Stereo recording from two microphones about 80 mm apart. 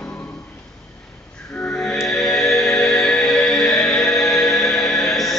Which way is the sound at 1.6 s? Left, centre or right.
Centre.